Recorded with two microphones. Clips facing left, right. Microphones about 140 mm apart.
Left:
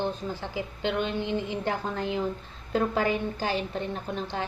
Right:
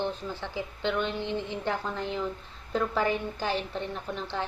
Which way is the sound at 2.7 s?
55° left (ahead or behind).